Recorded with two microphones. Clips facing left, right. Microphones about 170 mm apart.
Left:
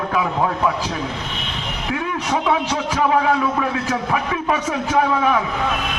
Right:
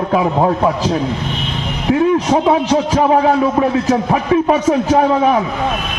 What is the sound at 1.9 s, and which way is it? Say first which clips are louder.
A man's voice: right 10 dB; 35° right (ahead or behind).